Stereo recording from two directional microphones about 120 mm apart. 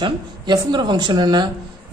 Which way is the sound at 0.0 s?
40° right (ahead or behind).